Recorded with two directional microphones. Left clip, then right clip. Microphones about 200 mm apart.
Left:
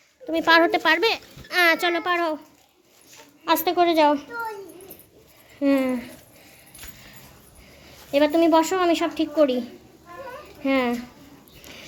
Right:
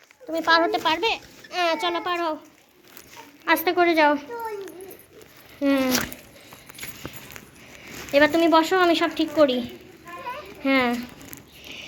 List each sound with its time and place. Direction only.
0.3 s speech: 40° left (ahead or behind)
3.4 s a woman's voice: 20° left (ahead or behind)
5.5 s a woman's voice: 20° left (ahead or behind)
8.1 s a woman's voice: 15° left (ahead or behind)